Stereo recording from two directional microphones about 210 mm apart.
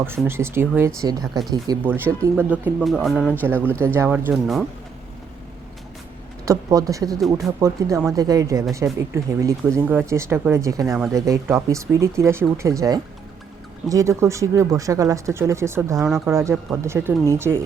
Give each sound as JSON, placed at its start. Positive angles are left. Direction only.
{"t": 0.3, "sound": "speech", "side_deg": -10}
{"t": 3.4, "sound": "speech", "side_deg": -10}
{"t": 6.4, "sound": "speech", "side_deg": -15}
{"t": 16.0, "sound": "speech", "side_deg": 0}
{"t": 16.3, "sound": "speech", "side_deg": -15}